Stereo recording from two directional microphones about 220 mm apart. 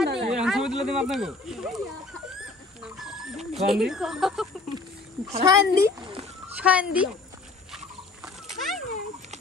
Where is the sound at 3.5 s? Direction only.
Centre (ahead or behind).